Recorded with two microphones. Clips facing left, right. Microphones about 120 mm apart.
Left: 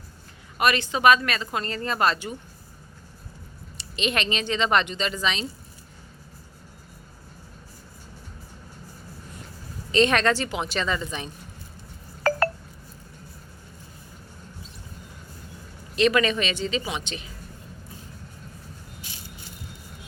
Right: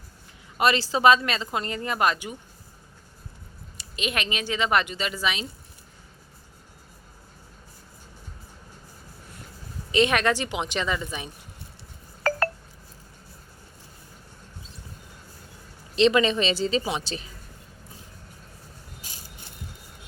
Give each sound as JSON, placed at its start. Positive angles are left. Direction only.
{"t": 0.6, "sound": "a woman's voice", "side_deg": -30}
{"t": 3.8, "sound": "speech", "side_deg": -5}
{"t": 9.9, "sound": "speech", "side_deg": -10}
{"t": 16.0, "sound": "speech", "side_deg": -25}